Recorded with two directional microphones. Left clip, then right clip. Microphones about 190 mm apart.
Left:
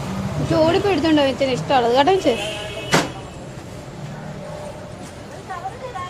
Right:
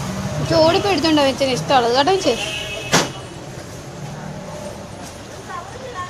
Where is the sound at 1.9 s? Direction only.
15° left (ahead or behind).